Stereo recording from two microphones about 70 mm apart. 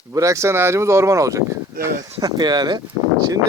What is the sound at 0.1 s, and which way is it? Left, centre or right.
Speech, right.